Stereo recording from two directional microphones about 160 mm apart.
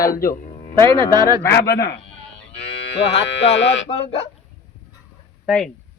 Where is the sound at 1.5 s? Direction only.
75° left (ahead or behind).